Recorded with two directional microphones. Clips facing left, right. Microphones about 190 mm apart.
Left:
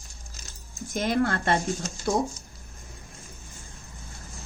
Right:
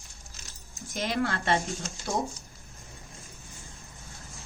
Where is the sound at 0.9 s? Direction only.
50° left (ahead or behind).